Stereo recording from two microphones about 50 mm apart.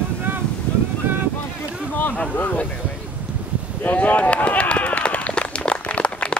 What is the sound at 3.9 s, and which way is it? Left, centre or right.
Run, left.